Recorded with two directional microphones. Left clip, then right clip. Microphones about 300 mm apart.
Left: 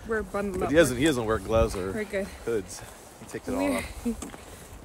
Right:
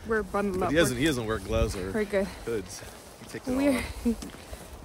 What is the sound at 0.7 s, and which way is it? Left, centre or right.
Speech, centre.